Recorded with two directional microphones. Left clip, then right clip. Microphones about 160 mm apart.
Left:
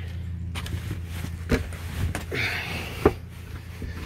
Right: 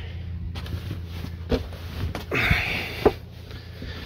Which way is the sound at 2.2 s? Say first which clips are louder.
Right 6 dB; 40° right (ahead or behind).